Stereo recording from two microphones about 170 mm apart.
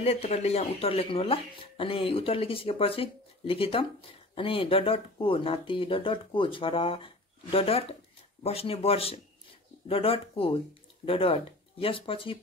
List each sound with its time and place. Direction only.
0.0 s speech: 40° left (ahead or behind)